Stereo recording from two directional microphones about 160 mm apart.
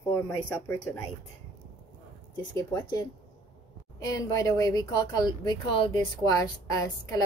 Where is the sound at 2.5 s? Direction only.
20° left (ahead or behind).